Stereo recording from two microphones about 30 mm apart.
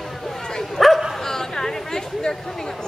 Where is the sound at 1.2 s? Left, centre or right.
Centre.